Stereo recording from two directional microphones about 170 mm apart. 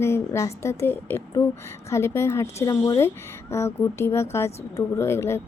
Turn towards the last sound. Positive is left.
turn(degrees=15)  # may be behind; listen again after turning